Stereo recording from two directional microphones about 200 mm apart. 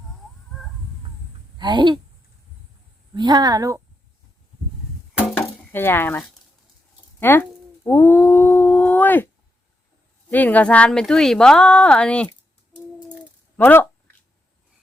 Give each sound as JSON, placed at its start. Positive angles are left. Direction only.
{"t": 1.5, "sound": "speech", "side_deg": -20}
{"t": 3.2, "sound": "speech", "side_deg": -20}
{"t": 5.4, "sound": "a sound", "side_deg": 10}
{"t": 7.2, "sound": "speech", "side_deg": 10}
{"t": 13.6, "sound": "speech", "side_deg": 10}